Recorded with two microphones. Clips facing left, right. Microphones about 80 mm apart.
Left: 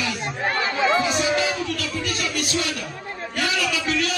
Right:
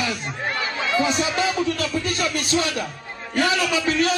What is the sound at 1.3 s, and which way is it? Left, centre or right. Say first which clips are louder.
Music: right 2 dB; right.